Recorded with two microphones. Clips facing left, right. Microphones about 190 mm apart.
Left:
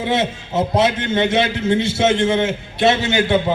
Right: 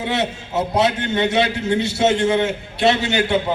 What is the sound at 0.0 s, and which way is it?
A man's voice, 20° left (ahead or behind).